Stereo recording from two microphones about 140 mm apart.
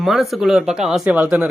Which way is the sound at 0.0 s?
Centre (ahead or behind).